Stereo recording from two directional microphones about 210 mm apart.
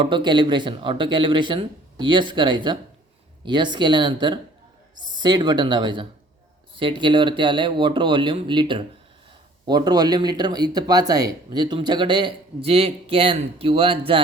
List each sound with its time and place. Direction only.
0.0 s speech: 20° right (ahead or behind)